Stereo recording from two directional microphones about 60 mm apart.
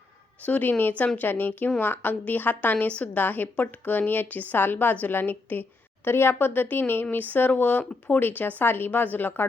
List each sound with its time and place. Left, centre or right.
0.4 s a woman's voice: left
6.1 s a woman's voice: left